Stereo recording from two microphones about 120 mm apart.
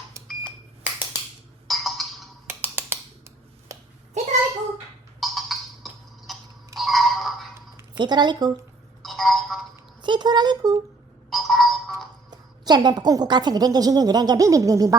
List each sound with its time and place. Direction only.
1.6 s music: centre (ahead or behind)
2.5 s a sound: 20° right (ahead or behind)
4.2 s a sound: 70° right (ahead or behind)
5.2 s music: centre (ahead or behind)
6.7 s a sound: centre (ahead or behind)
7.9 s a woman's voice: 40° right (ahead or behind)
9.0 s telephone: centre (ahead or behind)
10.0 s speech: 40° right (ahead or behind)
11.3 s ringtone: centre (ahead or behind)
12.3 s a woman's voice: 35° right (ahead or behind)